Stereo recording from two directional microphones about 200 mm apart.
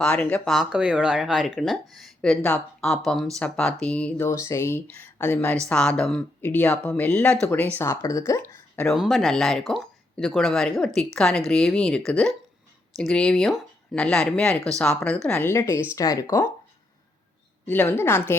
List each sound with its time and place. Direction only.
0.0 s speech: 5° left (ahead or behind)
8.9 s speech: centre (ahead or behind)
17.7 s speech: 10° left (ahead or behind)